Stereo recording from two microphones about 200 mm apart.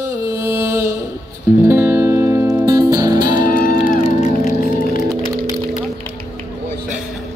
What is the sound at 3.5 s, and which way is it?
Music, 40° left (ahead or behind).